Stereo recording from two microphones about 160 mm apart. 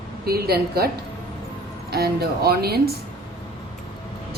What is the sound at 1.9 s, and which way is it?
Speech, 75° right (ahead or behind).